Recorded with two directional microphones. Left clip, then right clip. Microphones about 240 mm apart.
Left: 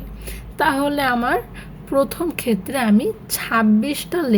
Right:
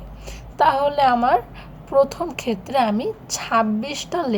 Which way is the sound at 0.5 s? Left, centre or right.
Left.